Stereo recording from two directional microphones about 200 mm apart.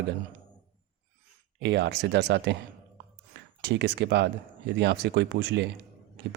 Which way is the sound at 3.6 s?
60° right (ahead or behind).